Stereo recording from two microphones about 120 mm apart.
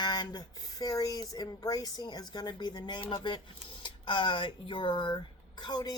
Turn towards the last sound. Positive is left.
turn(degrees=35)  # may be behind; listen again after turning